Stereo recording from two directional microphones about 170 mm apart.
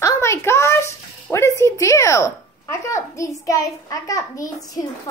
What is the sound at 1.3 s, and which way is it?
Speech, 15° left (ahead or behind).